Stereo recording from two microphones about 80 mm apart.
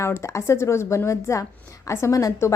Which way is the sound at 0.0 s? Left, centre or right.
Left.